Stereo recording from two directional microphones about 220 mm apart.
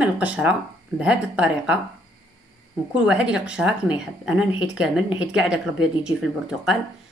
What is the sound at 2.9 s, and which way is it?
Speech, 5° right (ahead or behind).